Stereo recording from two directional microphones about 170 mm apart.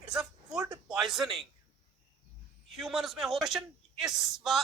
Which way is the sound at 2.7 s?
Centre (ahead or behind).